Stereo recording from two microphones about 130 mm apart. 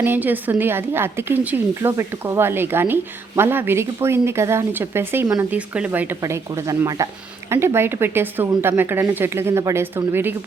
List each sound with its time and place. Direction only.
0.0 s a woman's voice: 15° right (ahead or behind)